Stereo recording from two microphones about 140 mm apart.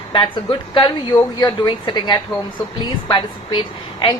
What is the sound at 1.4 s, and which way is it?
A woman's voice, 30° left (ahead or behind).